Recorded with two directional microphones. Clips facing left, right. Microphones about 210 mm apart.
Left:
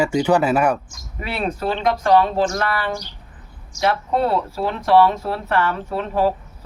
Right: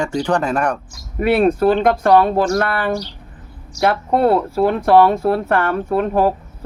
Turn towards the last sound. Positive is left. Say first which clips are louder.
# right 4 dB
turn(degrees=-50)  # may be behind; listen again after turning